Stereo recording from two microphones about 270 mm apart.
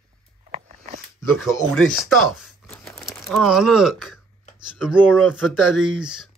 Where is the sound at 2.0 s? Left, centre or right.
Centre.